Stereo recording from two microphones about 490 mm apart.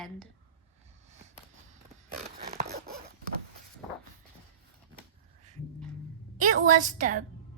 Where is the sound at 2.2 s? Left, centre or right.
Centre.